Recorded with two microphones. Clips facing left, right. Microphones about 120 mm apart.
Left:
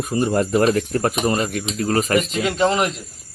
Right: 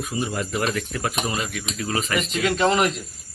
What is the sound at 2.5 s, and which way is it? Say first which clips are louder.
Speech: left 1 dB; 25° left (ahead or behind).